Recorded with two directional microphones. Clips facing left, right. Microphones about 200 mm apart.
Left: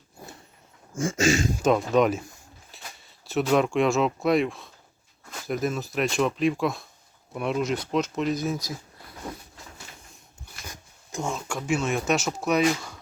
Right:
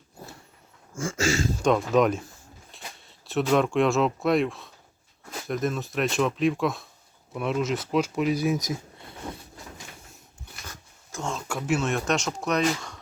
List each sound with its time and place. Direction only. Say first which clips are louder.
0.9 s a sound: left 3 dB; 20° left (ahead or behind)
1.6 s speech: even; centre (ahead or behind)
2.7 s a sound: right 2 dB; centre (ahead or behind)
3.2 s speech: even; centre (ahead or behind); by 9.0 s 20° right (ahead or behind)
10.7 s dog: left 6 dB; 10° left (ahead or behind)
11.4 s speech: right 2 dB; 5° right (ahead or behind)